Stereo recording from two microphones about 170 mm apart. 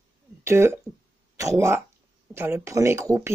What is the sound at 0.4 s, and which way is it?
Speech, 15° right (ahead or behind).